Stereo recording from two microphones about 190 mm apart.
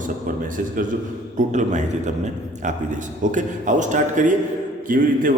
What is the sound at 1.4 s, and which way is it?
A man's voice, 40° right (ahead or behind).